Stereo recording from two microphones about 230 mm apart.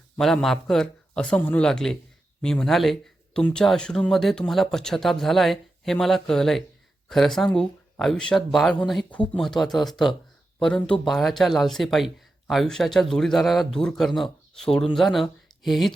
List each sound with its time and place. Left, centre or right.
0.2 s speech: centre